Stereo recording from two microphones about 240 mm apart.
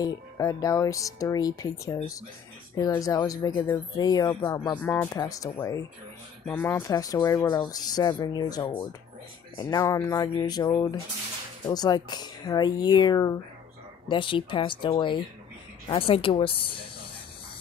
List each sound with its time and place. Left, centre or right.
0.0 s speech: centre